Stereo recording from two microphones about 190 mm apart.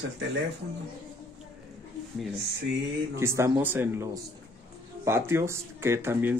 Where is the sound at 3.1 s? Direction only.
15° right (ahead or behind).